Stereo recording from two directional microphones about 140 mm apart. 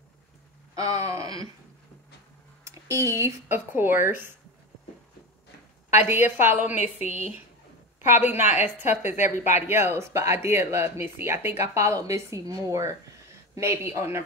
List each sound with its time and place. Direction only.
0.7 s a sound: 25° right (ahead or behind)
1.2 s speech: 35° left (ahead or behind)
2.6 s speech: 20° right (ahead or behind)
5.9 s a woman's voice: 15° right (ahead or behind)
8.1 s a woman's voice: 15° right (ahead or behind)
8.5 s a woman's voice: 55° left (ahead or behind)
9.7 s speech: 15° right (ahead or behind)